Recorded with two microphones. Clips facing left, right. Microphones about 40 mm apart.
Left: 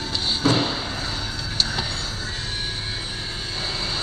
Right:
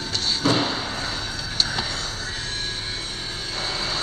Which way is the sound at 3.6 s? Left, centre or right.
Centre.